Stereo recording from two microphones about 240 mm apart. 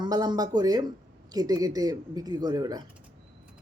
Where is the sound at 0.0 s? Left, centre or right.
Centre.